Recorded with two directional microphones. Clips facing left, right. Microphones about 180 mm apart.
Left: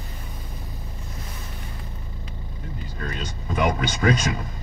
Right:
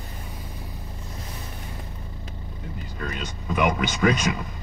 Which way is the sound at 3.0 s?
35° left (ahead or behind).